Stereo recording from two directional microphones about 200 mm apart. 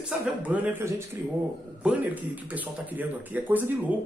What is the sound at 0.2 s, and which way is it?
A man's voice, 5° right (ahead or behind).